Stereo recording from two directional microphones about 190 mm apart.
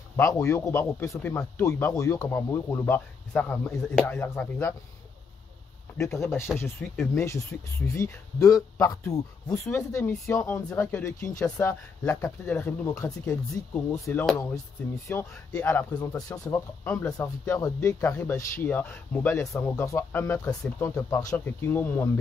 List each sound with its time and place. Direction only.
0.1 s speech: 15° left (ahead or behind)
5.9 s speech: 15° left (ahead or behind)